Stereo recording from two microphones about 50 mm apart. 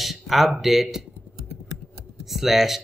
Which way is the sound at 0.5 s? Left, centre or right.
Centre.